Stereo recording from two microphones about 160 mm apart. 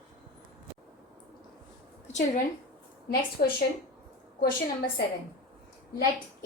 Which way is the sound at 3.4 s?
60° left (ahead or behind).